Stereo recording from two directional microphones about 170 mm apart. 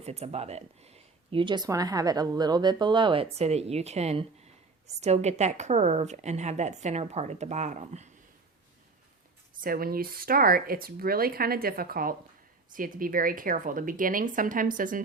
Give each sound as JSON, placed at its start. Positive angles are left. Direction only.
{"t": 0.0, "sound": "speech", "side_deg": -35}
{"t": 9.6, "sound": "speech", "side_deg": -60}